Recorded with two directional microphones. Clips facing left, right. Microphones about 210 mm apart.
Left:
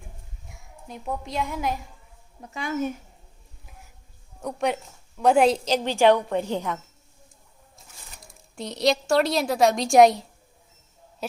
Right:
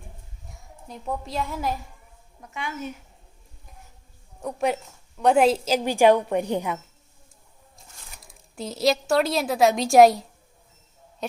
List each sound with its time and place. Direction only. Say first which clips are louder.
0.9 s a woman's voice: even; centre (ahead or behind)
2.4 s speech: left 6 dB; 35° left (ahead or behind)
4.4 s a woman's voice: right 1 dB; centre (ahead or behind)
8.2 s a woman's voice: right 1 dB; centre (ahead or behind)
11.2 s a sound: right 1 dB; 5° left (ahead or behind)